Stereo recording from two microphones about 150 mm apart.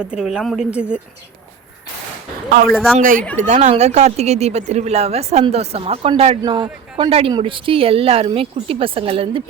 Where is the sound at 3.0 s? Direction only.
65° right (ahead or behind).